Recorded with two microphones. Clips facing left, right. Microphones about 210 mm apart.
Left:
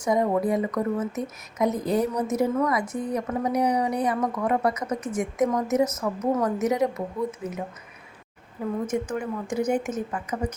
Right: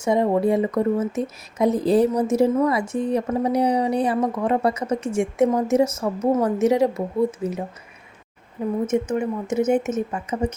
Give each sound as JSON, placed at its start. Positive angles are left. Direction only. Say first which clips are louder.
{"t": 0.0, "sound": "speech", "louder": "right 4 dB", "side_deg": -25}
{"t": 8.9, "sound": "speech", "louder": "right 5 dB", "side_deg": -25}